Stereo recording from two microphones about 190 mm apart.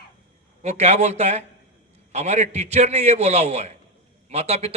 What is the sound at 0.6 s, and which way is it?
A man's voice, 35° right (ahead or behind).